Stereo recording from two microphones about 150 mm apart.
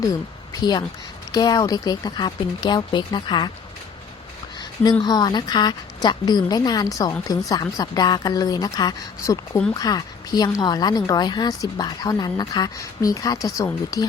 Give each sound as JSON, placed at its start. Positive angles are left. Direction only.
{"t": 0.6, "sound": "a woman's voice", "side_deg": 30}
{"t": 4.8, "sound": "a woman's voice", "side_deg": 25}